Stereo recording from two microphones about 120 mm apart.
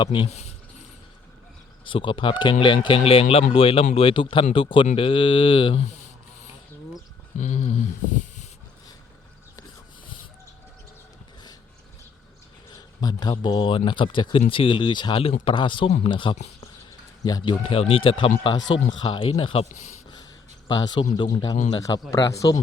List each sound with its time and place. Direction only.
0.0 s speech: 40° left (ahead or behind)
0.3 s speech: 65° left (ahead or behind)
1.8 s speech: 45° left (ahead or behind)
7.3 s speech: 80° left
13.0 s speech: 35° left (ahead or behind)
17.2 s speech: 35° left (ahead or behind)
17.6 s speech: 50° left (ahead or behind)
20.7 s speech: 35° left (ahead or behind)